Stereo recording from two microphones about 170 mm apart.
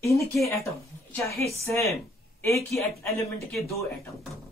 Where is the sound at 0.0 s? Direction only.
15° left (ahead or behind).